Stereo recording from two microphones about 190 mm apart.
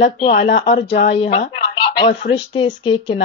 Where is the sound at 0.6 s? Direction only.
25° left (ahead or behind).